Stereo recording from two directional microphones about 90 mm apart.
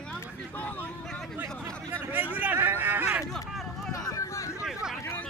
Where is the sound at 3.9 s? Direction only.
40° left (ahead or behind).